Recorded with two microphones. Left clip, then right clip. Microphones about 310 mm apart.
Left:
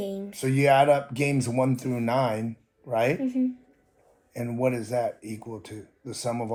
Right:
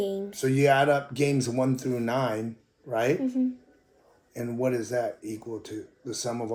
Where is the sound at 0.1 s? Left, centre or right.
Left.